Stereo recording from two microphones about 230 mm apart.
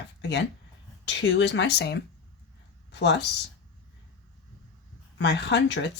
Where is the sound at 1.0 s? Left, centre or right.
Left.